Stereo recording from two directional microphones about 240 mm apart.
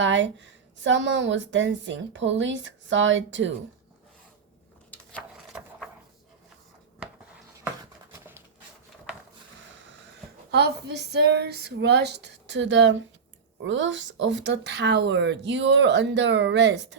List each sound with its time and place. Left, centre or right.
0.0 s a woman's voice: right
5.1 s a sound: centre
10.5 s a woman's voice: right